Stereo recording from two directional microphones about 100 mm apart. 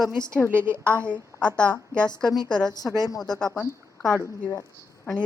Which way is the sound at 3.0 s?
35° left (ahead or behind).